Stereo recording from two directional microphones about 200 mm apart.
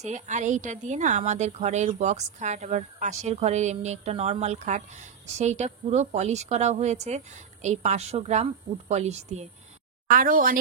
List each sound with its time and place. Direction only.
0.0 s a woman's voice: 35° right (ahead or behind)